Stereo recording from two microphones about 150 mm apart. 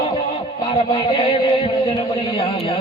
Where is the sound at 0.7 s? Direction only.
35° left (ahead or behind).